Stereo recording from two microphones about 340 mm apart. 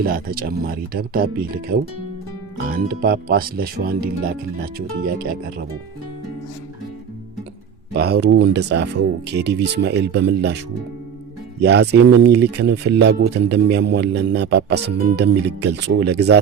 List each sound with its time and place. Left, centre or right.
0.0 s speech: right
7.9 s speech: right
11.6 s speech: right